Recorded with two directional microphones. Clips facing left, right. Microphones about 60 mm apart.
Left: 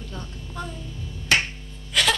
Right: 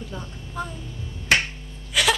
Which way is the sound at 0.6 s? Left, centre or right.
Centre.